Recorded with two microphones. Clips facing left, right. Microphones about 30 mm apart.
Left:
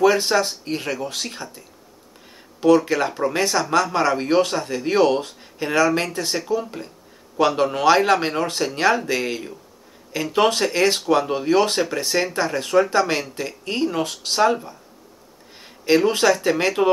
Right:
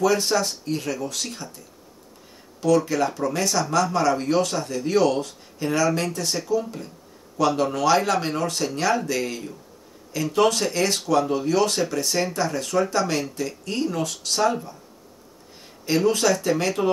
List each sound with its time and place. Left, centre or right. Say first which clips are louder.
0.0 s speech: left 4 dB; left
2.6 s speech: left 4 dB; left
15.8 s speech: left 3 dB; left